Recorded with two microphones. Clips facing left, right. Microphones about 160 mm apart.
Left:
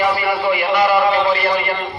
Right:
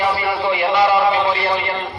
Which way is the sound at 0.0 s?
25° right (ahead or behind).